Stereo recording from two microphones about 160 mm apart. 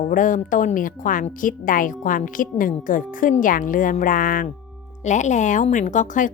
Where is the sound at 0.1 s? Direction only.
55° left (ahead or behind).